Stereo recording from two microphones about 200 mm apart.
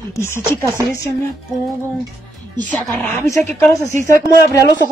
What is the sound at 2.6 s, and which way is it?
Speech, 5° left (ahead or behind).